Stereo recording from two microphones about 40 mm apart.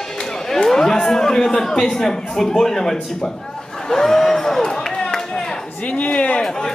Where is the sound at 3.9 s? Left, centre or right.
Centre.